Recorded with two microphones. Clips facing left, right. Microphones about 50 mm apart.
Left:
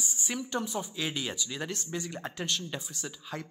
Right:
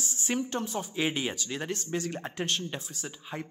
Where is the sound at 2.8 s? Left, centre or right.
Centre.